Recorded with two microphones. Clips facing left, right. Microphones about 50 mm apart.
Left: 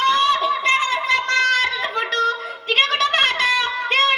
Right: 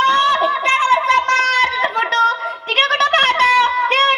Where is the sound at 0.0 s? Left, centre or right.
Right.